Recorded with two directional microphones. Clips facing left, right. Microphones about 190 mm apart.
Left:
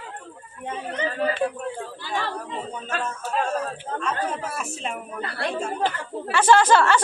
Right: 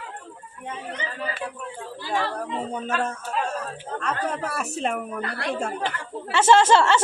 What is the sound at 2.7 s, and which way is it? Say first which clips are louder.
Speech: right 4 dB; 60° right (ahead or behind).